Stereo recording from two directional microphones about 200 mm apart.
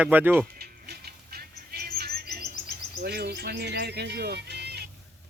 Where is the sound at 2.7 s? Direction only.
55° right (ahead or behind).